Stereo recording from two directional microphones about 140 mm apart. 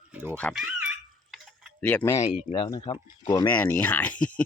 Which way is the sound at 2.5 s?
30° left (ahead or behind).